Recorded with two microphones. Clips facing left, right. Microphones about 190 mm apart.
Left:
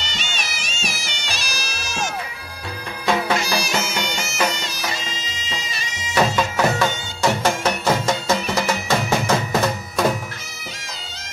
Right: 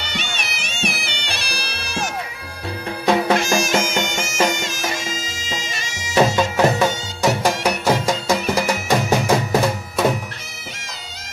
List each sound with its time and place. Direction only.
0.0 s music: 60° right (ahead or behind)
3.3 s music: 50° right (ahead or behind)
6.1 s music: 20° right (ahead or behind)
10.0 s music: 5° right (ahead or behind)